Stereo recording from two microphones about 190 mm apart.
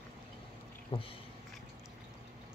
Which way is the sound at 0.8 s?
30° left (ahead or behind).